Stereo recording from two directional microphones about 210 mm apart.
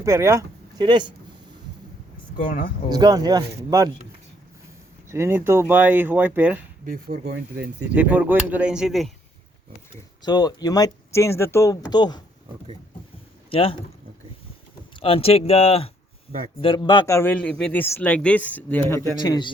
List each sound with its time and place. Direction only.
0.0 s speech: 15° right (ahead or behind)
2.9 s speech: 20° right (ahead or behind)
5.0 s speech: 10° right (ahead or behind)
6.8 s speech: 45° right (ahead or behind)
7.9 s speech: 5° right (ahead or behind)
10.2 s a man's voice: 20° left (ahead or behind)
13.5 s speech: 25° left (ahead or behind)
15.0 s a man's voice: 25° left (ahead or behind); by 19.0 s 10° left (ahead or behind)
19.2 s speech: 20° left (ahead or behind)